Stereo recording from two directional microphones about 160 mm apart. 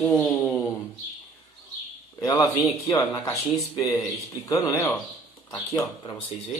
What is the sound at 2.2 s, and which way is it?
Speech, 25° left (ahead or behind).